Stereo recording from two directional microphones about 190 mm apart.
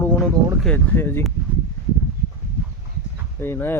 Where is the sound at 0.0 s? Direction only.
10° left (ahead or behind).